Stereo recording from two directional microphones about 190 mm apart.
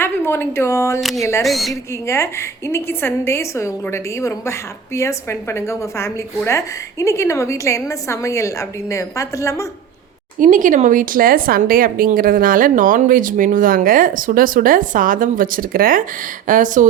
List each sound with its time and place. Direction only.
0.0 s a woman's voice: 10° left (ahead or behind)
1.5 s a woman's voice: centre (ahead or behind)
2.0 s a woman's voice: 15° left (ahead or behind)
10.4 s a woman's voice: 45° right (ahead or behind)